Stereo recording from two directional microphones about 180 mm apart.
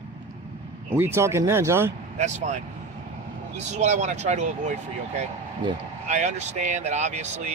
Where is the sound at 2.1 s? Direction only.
40° right (ahead or behind).